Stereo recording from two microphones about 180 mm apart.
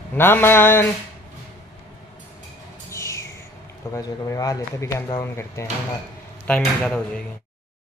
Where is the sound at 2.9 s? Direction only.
15° left (ahead or behind).